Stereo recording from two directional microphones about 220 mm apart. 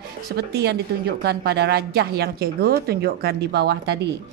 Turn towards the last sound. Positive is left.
turn(degrees=-50)  # may be behind; listen again after turning